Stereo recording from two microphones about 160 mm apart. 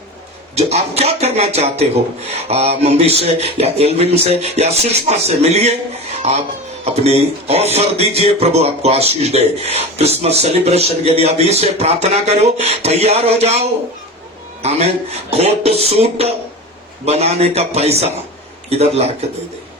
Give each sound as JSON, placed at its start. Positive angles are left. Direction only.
{"t": 0.5, "sound": "a man's voice", "side_deg": -40}